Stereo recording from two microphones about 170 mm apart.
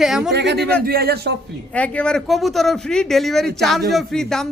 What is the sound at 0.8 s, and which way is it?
Speech, 65° right (ahead or behind).